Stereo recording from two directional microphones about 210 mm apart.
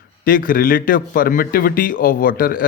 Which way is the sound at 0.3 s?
40° left (ahead or behind).